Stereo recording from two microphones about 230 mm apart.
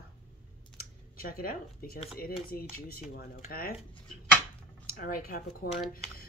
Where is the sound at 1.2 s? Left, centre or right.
Left.